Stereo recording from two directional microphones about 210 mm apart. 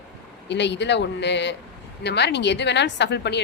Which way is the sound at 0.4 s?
55° left (ahead or behind).